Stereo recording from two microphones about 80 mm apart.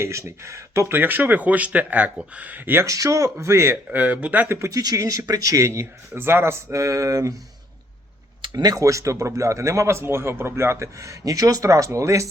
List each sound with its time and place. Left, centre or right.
0.0 s speech: right
2.8 s speech: right
3.9 s speech: right
4.6 s speech: right
8.5 s speech: right